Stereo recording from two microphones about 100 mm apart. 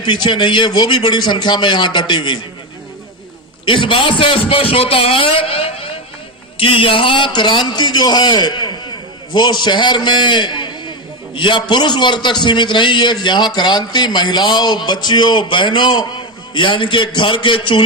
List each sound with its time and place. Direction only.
0.0 s a man's voice: 50° left (ahead or behind)
3.7 s a man's voice: 60° left (ahead or behind)